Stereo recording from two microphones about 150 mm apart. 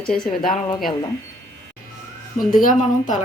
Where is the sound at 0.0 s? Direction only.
5° left (ahead or behind).